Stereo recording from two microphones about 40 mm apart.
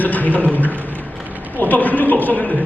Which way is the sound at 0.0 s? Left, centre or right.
Left.